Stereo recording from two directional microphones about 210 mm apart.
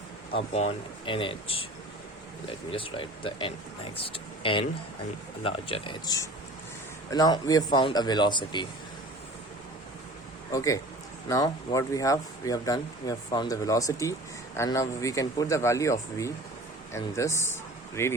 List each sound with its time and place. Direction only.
0.3 s speech: 30° left (ahead or behind)
10.5 s speech: 15° left (ahead or behind)